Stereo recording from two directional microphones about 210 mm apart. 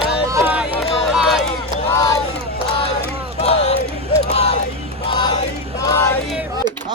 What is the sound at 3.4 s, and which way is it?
Crowd, 30° left (ahead or behind).